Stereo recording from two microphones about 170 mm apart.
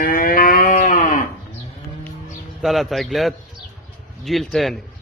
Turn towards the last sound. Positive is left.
turn(degrees=0)  # may be behind; listen again after turning